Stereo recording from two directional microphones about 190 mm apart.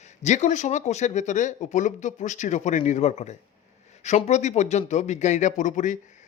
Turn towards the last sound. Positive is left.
turn(degrees=40)  # may be behind; listen again after turning